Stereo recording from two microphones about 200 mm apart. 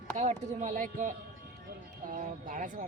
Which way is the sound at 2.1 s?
40° right (ahead or behind).